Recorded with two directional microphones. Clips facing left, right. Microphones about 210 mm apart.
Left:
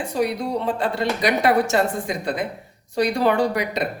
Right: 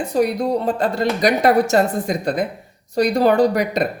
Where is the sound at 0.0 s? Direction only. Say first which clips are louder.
Right 5 dB; 40° right (ahead or behind).